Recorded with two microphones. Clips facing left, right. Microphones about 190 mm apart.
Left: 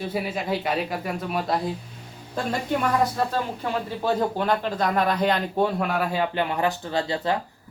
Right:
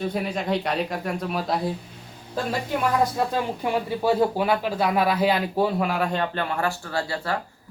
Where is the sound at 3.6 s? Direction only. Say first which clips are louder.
Right 3 dB; 10° right (ahead or behind).